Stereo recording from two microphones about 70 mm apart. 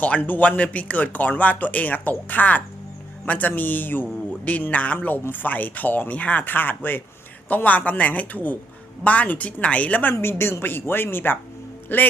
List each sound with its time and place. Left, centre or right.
0.0 s a woman's voice: left